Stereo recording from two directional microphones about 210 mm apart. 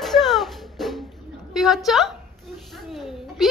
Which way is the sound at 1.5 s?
Centre (ahead or behind).